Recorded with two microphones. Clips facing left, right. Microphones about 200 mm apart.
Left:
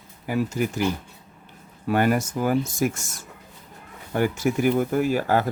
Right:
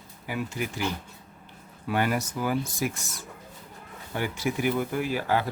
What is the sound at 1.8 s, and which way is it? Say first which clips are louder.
Speech: left 6 dB; 50° left (ahead or behind).